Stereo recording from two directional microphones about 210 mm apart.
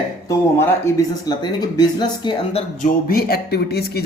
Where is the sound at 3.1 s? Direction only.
45° left (ahead or behind).